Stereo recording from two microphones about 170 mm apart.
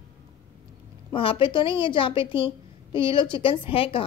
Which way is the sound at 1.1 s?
30° left (ahead or behind).